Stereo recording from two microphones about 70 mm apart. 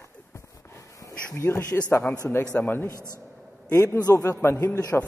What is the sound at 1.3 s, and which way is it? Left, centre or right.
A man's voice, left.